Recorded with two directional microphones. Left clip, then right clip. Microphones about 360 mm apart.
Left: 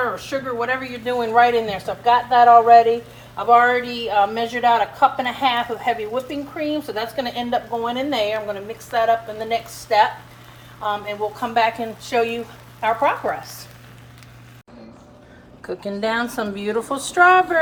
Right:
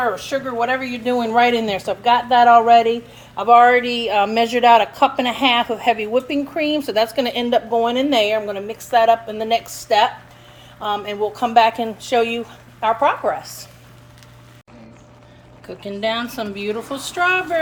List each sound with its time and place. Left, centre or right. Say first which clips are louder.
0.6 s a woman's voice: right 3 dB; right
16.0 s a woman's voice: right 1 dB; centre